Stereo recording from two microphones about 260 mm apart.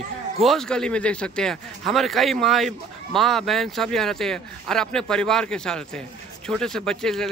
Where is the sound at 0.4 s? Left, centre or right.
Centre.